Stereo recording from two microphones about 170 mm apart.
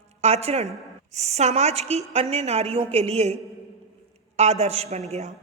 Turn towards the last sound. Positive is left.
turn(degrees=-40)  # may be behind; listen again after turning